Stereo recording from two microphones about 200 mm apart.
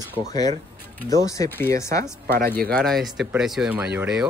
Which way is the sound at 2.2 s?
50° right (ahead or behind).